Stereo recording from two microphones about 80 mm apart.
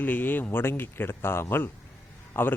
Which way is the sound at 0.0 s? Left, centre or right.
Left.